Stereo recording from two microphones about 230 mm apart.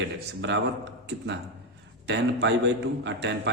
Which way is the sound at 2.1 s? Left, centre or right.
Right.